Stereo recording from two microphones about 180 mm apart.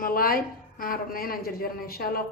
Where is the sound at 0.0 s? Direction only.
55° left (ahead or behind).